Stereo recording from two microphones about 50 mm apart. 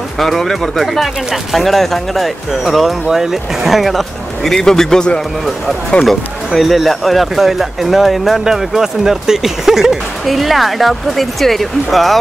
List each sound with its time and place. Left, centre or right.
0.2 s speech: centre
4.6 s speech: centre
6.0 s speech: centre